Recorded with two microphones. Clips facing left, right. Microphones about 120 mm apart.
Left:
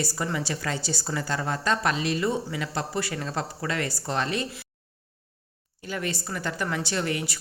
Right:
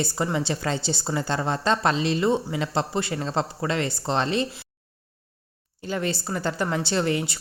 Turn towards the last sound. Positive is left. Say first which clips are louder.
# right 4 dB
turn(degrees=-25)  # may be behind; listen again after turning